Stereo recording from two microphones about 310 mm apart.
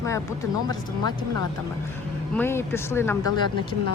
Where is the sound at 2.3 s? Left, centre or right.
Centre.